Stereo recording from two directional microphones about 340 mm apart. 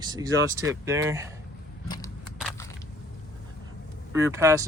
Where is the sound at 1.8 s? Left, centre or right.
Centre.